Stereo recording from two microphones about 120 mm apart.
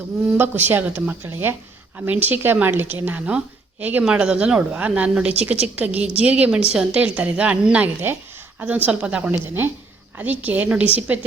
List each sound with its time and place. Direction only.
0.3 s a woman's voice: 15° right (ahead or behind)